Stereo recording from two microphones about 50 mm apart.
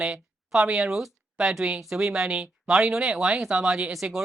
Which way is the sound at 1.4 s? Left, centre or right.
Centre.